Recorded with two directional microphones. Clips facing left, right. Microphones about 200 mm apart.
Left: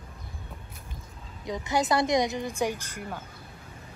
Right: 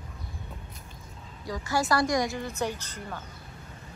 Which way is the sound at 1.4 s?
20° left (ahead or behind).